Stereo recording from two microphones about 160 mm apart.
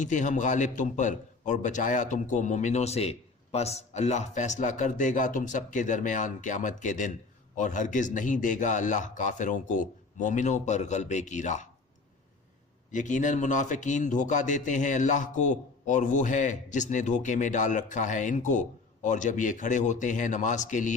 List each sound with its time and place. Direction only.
0.0 s a man's voice: 50° left (ahead or behind)
12.9 s a man's voice: 50° left (ahead or behind)